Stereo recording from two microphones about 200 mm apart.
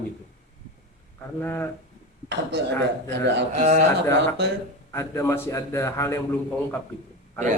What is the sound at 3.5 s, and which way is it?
Speech, 35° right (ahead or behind).